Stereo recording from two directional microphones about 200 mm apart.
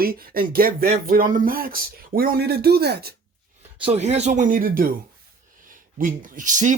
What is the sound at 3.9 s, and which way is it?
Speech, 35° right (ahead or behind).